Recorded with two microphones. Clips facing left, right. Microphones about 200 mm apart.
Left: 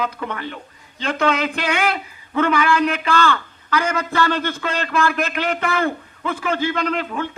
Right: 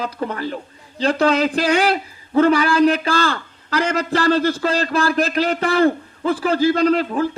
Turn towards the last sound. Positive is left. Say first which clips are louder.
# right 6 dB
turn(degrees=-35)  # may be behind; listen again after turning